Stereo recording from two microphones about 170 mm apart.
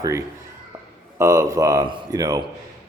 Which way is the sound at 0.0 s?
20° right (ahead or behind).